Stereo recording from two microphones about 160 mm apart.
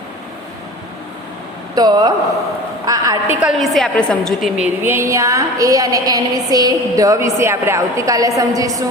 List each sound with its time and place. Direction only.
1.7 s a woman's voice: 25° right (ahead or behind)
3.4 s a woman's voice: centre (ahead or behind); by 8.8 s 20° right (ahead or behind)